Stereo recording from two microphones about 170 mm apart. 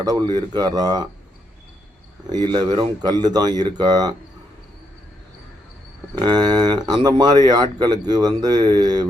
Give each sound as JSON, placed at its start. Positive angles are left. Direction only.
{"t": 0.0, "sound": "speech", "side_deg": -25}
{"t": 2.3, "sound": "speech", "side_deg": -25}
{"t": 6.1, "sound": "speech", "side_deg": -25}